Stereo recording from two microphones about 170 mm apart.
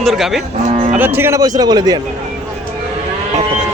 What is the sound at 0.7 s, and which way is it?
Cattle, 45° right (ahead or behind).